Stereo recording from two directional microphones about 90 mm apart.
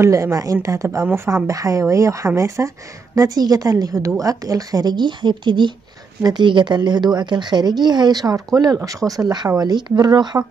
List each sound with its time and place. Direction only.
0.0 s speech: 35° right (ahead or behind); by 10.4 s 50° right (ahead or behind)